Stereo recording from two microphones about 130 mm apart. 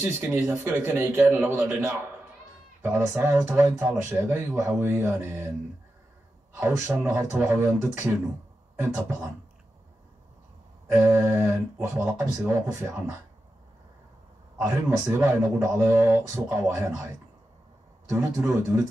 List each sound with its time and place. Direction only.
0.0 s a man's voice: 20° right (ahead or behind)
6.5 s speech: 20° right (ahead or behind)
10.9 s speech: 20° right (ahead or behind)
14.6 s speech: 20° right (ahead or behind)